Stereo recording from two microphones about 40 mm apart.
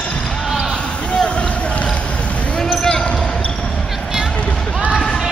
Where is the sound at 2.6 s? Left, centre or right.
Centre.